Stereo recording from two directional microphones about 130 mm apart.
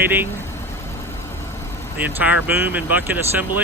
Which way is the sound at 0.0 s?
15° right (ahead or behind).